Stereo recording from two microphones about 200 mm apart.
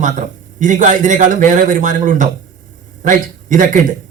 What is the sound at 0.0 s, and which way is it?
Speech, 40° right (ahead or behind).